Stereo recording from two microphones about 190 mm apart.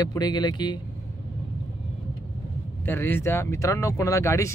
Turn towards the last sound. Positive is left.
turn(degrees=15)  # may be behind; listen again after turning